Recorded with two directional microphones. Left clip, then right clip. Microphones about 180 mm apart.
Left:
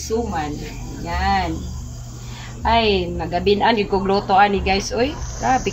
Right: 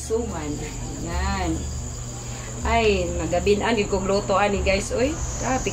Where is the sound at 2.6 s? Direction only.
35° left (ahead or behind).